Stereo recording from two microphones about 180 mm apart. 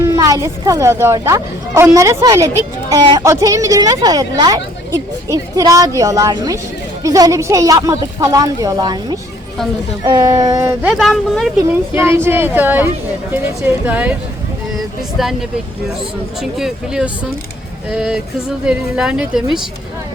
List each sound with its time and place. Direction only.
0.0 s a woman's voice: 15° right (ahead or behind)
10.9 s speech: centre (ahead or behind)
11.7 s speech: 15° right (ahead or behind)
15.2 s speech: centre (ahead or behind)